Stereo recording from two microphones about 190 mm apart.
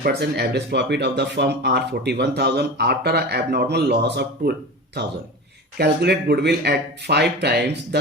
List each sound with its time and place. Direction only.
0.0 s speech: 60° right (ahead or behind)